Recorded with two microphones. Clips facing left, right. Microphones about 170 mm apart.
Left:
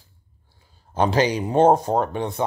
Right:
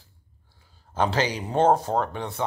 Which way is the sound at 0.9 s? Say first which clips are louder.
Left 5 dB; 15° left (ahead or behind).